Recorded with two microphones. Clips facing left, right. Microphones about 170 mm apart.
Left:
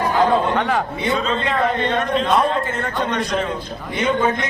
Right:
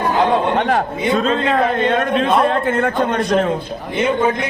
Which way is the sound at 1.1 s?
50° right (ahead or behind).